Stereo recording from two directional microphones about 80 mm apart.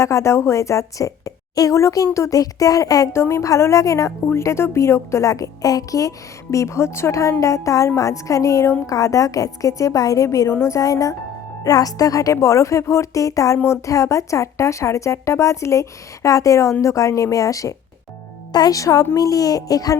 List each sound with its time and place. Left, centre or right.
0.0 s a woman's voice: left
3.1 s a woman's voice: left